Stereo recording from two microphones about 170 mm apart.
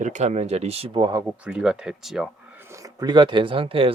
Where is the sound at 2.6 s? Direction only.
15° right (ahead or behind); by 3.9 s 30° right (ahead or behind).